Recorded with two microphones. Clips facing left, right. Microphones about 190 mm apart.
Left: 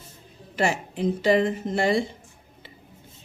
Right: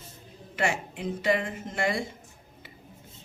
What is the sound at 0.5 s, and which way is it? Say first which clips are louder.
A woman's voice: left 4 dB; 35° left (ahead or behind).